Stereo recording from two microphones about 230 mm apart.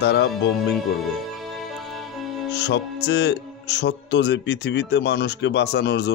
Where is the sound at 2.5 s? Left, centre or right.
Left.